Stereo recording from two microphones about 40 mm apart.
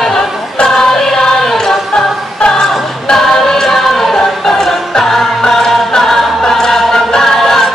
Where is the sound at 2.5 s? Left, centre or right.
Centre.